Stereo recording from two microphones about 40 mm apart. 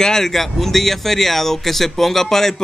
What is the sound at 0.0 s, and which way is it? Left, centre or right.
Speech, centre.